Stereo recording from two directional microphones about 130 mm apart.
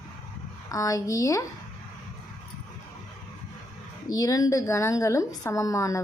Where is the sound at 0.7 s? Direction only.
25° left (ahead or behind).